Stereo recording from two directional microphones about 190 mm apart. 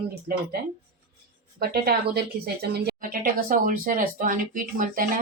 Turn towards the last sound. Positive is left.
turn(degrees=-45)  # may be behind; listen again after turning